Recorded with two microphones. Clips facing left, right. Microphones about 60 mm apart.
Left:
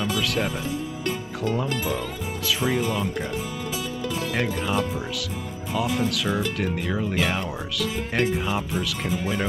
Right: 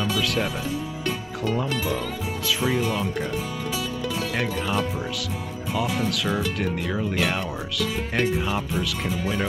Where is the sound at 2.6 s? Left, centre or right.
Centre.